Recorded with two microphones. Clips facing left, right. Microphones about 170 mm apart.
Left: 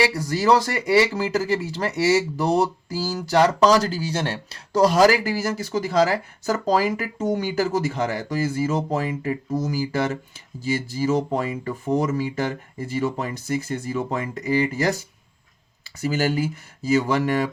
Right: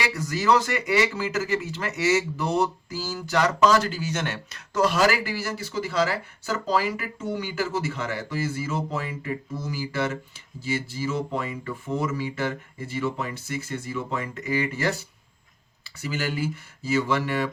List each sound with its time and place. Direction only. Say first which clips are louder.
0.0 s speech: left 5 dB; 35° left (ahead or behind)